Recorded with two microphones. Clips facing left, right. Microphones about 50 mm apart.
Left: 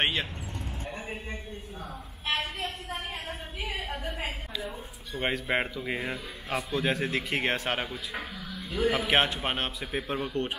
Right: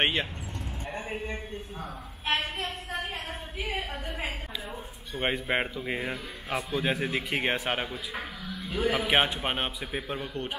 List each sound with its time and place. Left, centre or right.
0.0 s speech: right
0.9 s a man's voice: right
3.9 s a woman's voice: centre
8.6 s a man's voice: right
8.9 s a man's voice: centre